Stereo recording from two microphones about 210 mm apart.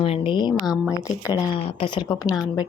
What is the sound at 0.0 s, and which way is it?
A woman's voice, 25° left (ahead or behind).